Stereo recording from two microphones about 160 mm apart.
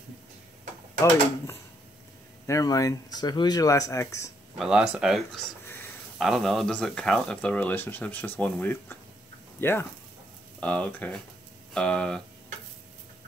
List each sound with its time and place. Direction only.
2.4 s speech: 20° left (ahead or behind)
4.6 s speech: 5° right (ahead or behind)